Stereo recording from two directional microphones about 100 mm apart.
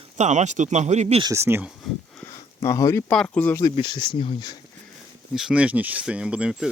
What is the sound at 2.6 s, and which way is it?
Speech, 30° left (ahead or behind).